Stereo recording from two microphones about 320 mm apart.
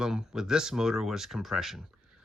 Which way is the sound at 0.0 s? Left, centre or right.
Centre.